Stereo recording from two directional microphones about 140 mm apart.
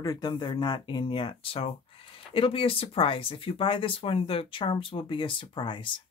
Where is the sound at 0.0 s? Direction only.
25° left (ahead or behind).